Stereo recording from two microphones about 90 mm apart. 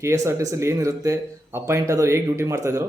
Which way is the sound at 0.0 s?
35° right (ahead or behind).